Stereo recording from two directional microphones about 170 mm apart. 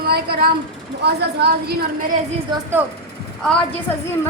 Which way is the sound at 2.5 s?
25° right (ahead or behind).